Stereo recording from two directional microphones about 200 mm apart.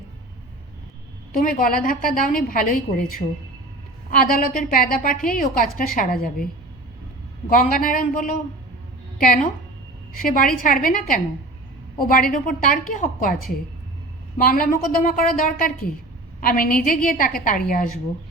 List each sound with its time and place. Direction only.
1.3 s a woman's voice: 45° left (ahead or behind)
7.5 s a woman's voice: 45° left (ahead or behind)
10.2 s a woman's voice: 45° left (ahead or behind)
14.3 s a woman's voice: 45° left (ahead or behind)